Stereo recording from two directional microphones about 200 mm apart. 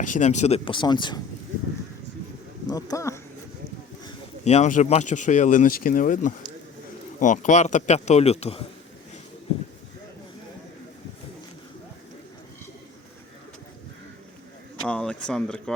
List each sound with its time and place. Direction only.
0.0 s speech: 40° left (ahead or behind); by 1.2 s 20° left (ahead or behind)
2.6 s speech: 20° left (ahead or behind)
4.4 s speech: 35° left (ahead or behind)
14.8 s speech: 5° left (ahead or behind)